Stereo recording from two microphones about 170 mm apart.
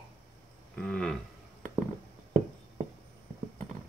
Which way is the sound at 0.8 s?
5° left (ahead or behind).